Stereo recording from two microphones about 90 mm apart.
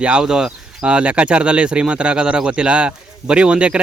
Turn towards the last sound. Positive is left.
turn(degrees=-10)  # may be behind; listen again after turning